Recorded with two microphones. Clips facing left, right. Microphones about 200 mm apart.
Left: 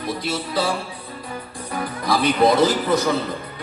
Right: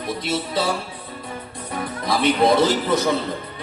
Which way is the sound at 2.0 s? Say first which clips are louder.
Even; 25° right (ahead or behind).